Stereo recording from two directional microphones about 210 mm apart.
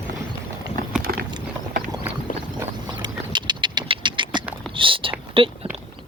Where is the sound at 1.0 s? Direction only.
45° right (ahead or behind).